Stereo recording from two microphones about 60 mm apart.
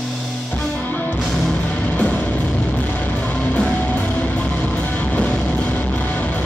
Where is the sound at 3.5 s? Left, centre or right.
Centre.